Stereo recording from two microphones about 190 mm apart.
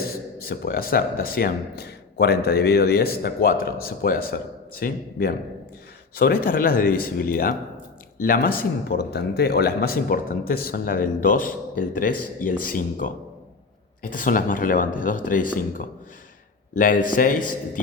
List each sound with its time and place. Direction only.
0.0 s speech: 55° left (ahead or behind)